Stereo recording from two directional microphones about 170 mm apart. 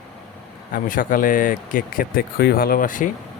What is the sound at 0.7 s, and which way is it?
Speech, 55° left (ahead or behind).